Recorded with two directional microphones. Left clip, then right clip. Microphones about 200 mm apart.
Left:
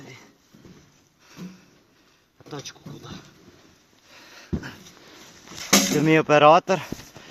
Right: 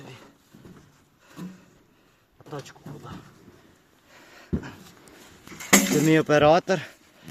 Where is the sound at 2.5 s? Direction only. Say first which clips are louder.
Left 1 dB; 50° left (ahead or behind).